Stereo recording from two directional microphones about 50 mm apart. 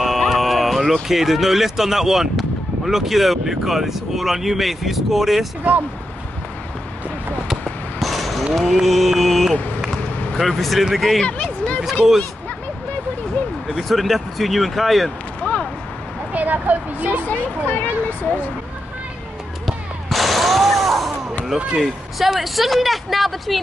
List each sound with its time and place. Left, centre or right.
0.0 s music: centre
1.0 s speech: centre
8.0 s a sound: centre
8.5 s speech: centre
11.2 s speech: left
13.7 s speech: centre
15.4 s a sound: left
16.3 s speech: right
17.3 s speech: left
19.6 s a sound: centre
21.7 s speech: centre